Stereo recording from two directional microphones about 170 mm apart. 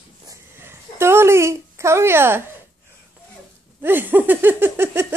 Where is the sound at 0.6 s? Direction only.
15° right (ahead or behind).